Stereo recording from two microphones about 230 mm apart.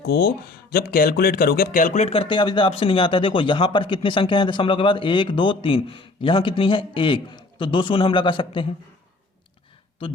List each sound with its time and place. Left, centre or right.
0.0 s speech: left
10.0 s speech: left